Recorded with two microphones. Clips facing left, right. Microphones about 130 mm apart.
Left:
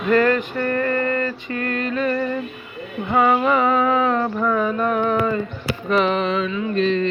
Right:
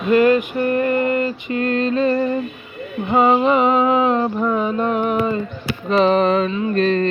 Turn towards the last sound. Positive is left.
turn(degrees=-45)  # may be behind; listen again after turning